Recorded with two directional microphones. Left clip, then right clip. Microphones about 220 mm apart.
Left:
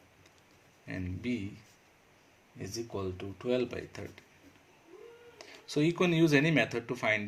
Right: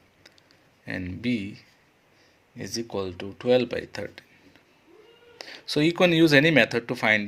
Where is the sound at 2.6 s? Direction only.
35° right (ahead or behind).